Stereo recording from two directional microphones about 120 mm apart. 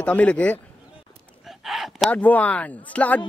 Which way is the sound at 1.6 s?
Centre (ahead or behind).